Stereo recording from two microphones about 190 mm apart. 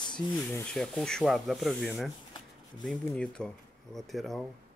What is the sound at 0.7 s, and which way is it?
Speech, centre (ahead or behind).